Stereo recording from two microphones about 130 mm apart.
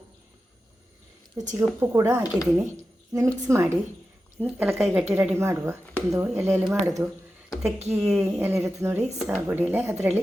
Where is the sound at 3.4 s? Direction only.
20° right (ahead or behind).